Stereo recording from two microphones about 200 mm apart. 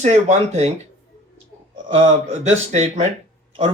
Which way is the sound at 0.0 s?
35° right (ahead or behind).